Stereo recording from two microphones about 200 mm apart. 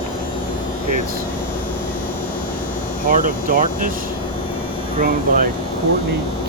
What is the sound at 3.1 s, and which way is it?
Speech, 45° right (ahead or behind).